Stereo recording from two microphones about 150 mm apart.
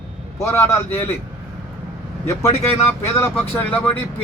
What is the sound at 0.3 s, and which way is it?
Speech, 20° left (ahead or behind).